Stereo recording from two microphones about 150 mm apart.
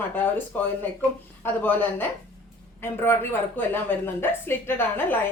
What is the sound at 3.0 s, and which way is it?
A woman's voice, 15° left (ahead or behind).